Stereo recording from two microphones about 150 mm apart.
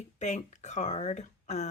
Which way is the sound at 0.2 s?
50° left (ahead or behind).